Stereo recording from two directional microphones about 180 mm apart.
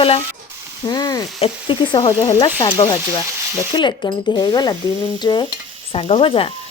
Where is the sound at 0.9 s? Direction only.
20° left (ahead or behind).